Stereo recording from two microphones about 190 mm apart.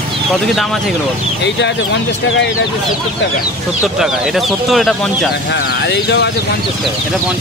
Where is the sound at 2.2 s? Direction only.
85° left.